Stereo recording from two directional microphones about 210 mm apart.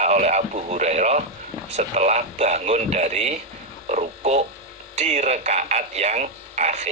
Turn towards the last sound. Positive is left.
turn(degrees=-35)  # may be behind; listen again after turning